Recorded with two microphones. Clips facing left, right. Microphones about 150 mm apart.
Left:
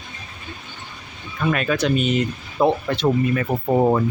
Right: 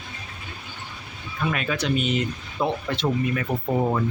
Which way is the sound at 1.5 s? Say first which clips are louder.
Left 5 dB; 55° left (ahead or behind).